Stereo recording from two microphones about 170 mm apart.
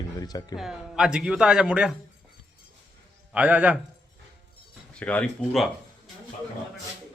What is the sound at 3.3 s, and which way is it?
Speech, 10° right (ahead or behind).